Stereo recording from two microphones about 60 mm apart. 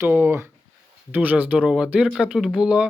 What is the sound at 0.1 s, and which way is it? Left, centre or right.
Speech, right.